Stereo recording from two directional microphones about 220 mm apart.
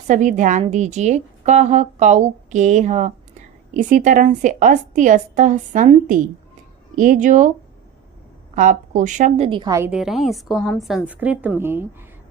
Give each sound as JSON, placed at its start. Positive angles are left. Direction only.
{"t": 0.1, "sound": "a woman's voice", "side_deg": -35}
{"t": 8.5, "sound": "a woman's voice", "side_deg": -35}
{"t": 9.5, "sound": "a woman's voice", "side_deg": -20}